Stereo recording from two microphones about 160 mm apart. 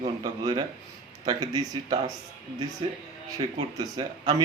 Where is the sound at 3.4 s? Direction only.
30° right (ahead or behind).